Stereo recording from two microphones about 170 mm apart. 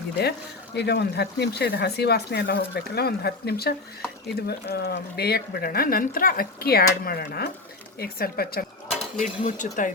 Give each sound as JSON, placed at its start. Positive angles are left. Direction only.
{"t": 0.2, "sound": "a woman's voice", "side_deg": 75}
{"t": 9.1, "sound": "speech", "side_deg": 50}